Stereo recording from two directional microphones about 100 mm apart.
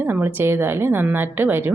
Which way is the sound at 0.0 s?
15° right (ahead or behind).